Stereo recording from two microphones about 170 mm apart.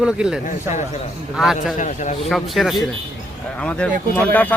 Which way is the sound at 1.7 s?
45° left (ahead or behind).